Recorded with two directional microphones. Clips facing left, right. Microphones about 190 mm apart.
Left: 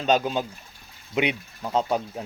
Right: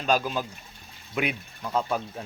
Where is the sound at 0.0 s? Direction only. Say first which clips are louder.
Left 3 dB; 25° left (ahead or behind).